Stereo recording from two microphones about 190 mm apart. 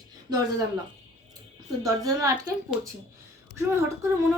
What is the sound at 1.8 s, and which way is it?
Speech, 20° right (ahead or behind).